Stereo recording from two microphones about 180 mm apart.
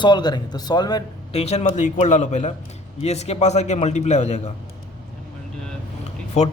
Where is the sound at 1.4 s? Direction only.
35° left (ahead or behind).